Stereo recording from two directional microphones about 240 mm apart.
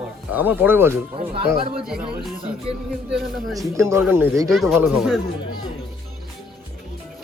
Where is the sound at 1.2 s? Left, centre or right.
Right.